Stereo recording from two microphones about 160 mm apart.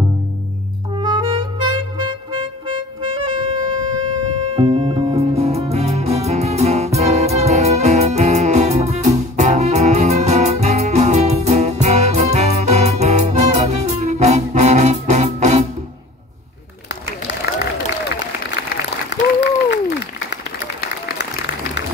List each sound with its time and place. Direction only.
0.9 s music: 30° right (ahead or behind); by 15.6 s 45° right (ahead or behind)
19.1 s applause: 90° left
19.7 s a sound: 90° left
21.2 s applause: 90° left